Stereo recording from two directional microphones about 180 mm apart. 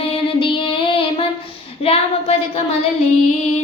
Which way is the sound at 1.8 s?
35° left (ahead or behind).